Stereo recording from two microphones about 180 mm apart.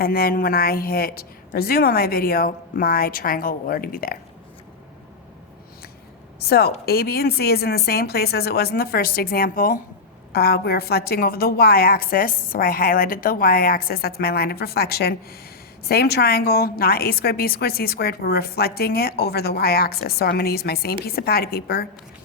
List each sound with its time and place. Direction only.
0.0 s a woman's voice: 55° left (ahead or behind)
6.4 s a woman's voice: 60° left (ahead or behind)